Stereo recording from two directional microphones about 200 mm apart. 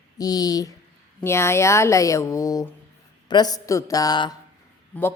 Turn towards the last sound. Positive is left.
turn(degrees=10)  # may be behind; listen again after turning